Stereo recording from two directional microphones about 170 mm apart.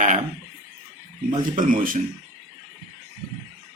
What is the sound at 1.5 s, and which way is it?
Speech, 50° right (ahead or behind).